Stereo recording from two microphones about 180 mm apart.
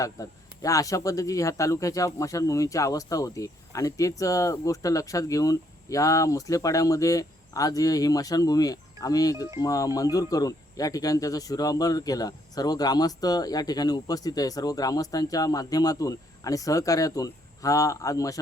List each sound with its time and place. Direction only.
0.0 s speech: 20° left (ahead or behind)